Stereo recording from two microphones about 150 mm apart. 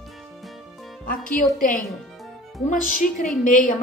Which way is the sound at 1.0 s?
65° left (ahead or behind).